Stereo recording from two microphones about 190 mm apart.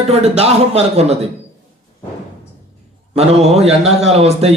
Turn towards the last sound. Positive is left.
turn(degrees=-35)  # may be behind; listen again after turning